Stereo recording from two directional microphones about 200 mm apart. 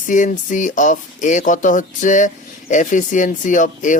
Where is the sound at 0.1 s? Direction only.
40° left (ahead or behind).